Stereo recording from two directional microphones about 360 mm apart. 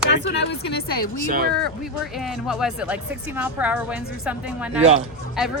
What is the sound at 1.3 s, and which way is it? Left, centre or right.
Speech, right.